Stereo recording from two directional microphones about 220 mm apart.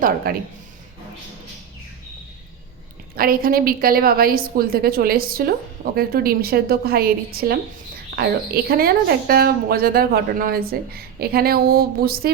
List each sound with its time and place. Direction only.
0.3 s a woman's voice: 40° right (ahead or behind)
3.2 s a woman's voice: 40° right (ahead or behind)